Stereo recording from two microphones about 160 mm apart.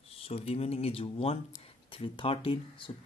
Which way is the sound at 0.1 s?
35° left (ahead or behind).